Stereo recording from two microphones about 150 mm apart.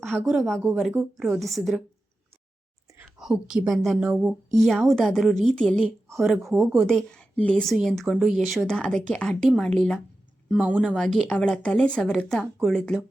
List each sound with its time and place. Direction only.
0.3 s speech: centre (ahead or behind)
3.0 s a woman's voice: 5° right (ahead or behind)